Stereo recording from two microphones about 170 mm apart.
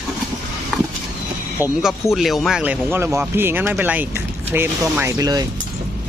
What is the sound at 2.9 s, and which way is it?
Speech, 15° right (ahead or behind).